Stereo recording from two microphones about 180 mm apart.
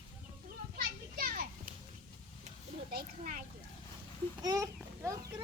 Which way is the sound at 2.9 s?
55° right (ahead or behind).